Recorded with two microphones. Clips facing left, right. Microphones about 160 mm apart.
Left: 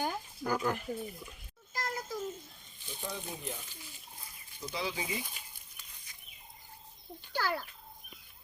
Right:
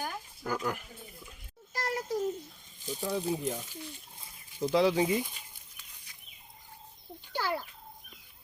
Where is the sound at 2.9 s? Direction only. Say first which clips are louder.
Right 9 dB; 40° right (ahead or behind).